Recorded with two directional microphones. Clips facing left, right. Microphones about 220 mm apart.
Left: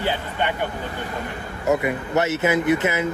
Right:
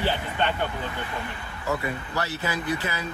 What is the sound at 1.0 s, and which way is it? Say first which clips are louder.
Speech: left 4 dB; 45° left (ahead or behind).